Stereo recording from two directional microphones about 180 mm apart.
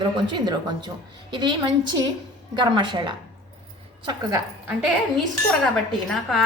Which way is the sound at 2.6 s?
25° right (ahead or behind).